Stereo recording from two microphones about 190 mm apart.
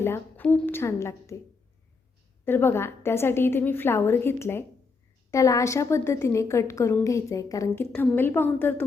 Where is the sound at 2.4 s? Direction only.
10° left (ahead or behind).